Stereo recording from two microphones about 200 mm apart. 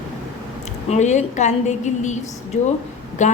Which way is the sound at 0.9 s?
35° left (ahead or behind).